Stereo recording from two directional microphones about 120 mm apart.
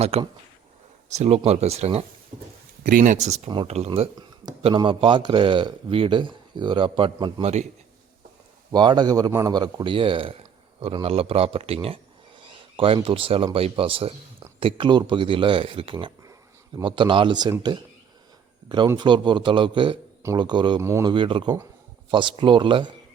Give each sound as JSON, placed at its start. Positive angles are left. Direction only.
{"t": 0.0, "sound": "speech", "side_deg": -55}
{"t": 2.3, "sound": "a man's voice", "side_deg": -75}
{"t": 2.8, "sound": "speech", "side_deg": -90}
{"t": 4.6, "sound": "speech", "side_deg": -45}
{"t": 7.4, "sound": "a man's voice", "side_deg": -70}
{"t": 8.7, "sound": "a man's voice", "side_deg": -40}
{"t": 18.9, "sound": "a man's voice", "side_deg": -40}